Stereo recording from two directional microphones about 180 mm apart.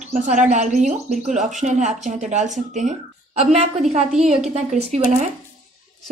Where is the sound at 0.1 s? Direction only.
45° right (ahead or behind).